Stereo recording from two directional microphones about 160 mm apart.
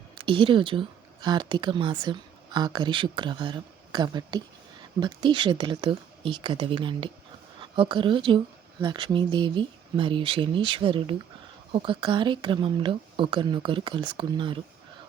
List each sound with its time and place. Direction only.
0.2 s a woman's voice: 30° right (ahead or behind)